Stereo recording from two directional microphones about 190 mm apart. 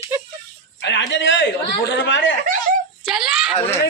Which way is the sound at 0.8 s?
70° left (ahead or behind).